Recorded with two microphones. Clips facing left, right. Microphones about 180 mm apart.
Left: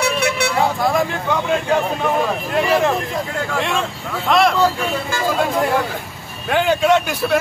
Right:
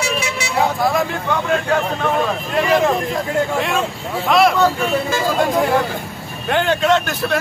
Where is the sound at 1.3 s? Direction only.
10° left (ahead or behind).